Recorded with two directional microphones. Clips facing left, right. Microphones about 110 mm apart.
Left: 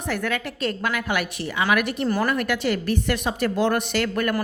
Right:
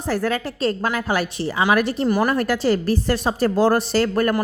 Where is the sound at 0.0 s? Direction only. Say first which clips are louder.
Right 4 dB; 35° right (ahead or behind).